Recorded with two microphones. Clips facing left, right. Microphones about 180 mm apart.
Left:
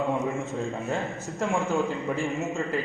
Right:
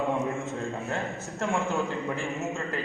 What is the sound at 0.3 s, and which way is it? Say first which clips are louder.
A man's voice: left 2 dB; 15° left (ahead or behind).